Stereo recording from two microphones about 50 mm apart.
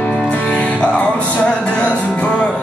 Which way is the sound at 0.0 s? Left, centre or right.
Left.